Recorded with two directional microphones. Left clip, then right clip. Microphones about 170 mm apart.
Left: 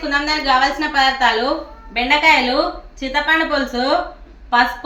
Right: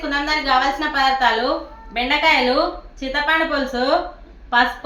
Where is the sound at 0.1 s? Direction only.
15° right (ahead or behind).